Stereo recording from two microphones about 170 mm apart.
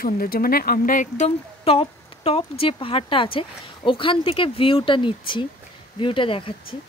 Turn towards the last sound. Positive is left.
turn(degrees=30)  # may be behind; listen again after turning